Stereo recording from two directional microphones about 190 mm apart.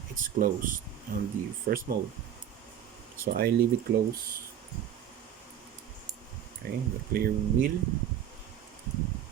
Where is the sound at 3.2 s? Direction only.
55° right (ahead or behind).